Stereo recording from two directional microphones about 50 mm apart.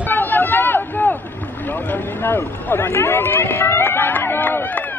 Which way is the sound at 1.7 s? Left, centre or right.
Left.